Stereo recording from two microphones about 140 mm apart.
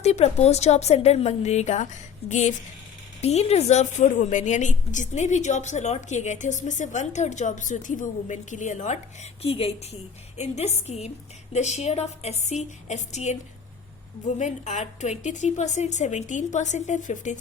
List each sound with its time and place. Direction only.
0.0 s a woman's voice: 50° left (ahead or behind)
9.4 s a woman's voice: 45° left (ahead or behind); by 17.4 s 60° left (ahead or behind)